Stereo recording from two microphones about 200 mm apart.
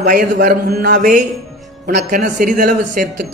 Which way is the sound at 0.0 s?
45° right (ahead or behind).